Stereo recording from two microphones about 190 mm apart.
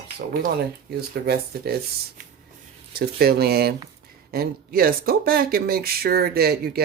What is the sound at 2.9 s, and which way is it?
Speech, 55° right (ahead or behind).